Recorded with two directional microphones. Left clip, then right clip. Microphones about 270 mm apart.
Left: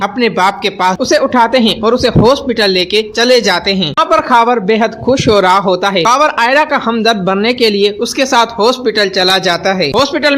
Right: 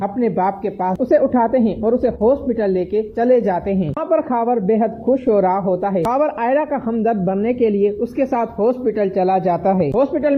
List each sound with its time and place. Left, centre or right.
0.3 s speech: centre
2.0 s a man's voice: left
3.2 s a man's voice: centre
9.7 s a man's voice: left